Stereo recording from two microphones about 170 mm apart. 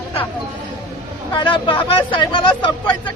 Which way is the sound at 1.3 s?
30° left (ahead or behind).